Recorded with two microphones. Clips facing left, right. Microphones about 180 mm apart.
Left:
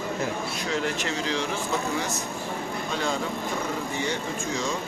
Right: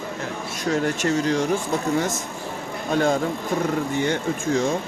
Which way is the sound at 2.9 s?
50° right (ahead or behind).